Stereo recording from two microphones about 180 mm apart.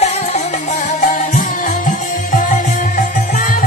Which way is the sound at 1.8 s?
45° left (ahead or behind).